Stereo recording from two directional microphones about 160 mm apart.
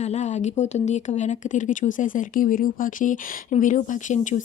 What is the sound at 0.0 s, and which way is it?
A woman's voice, 45° left (ahead or behind).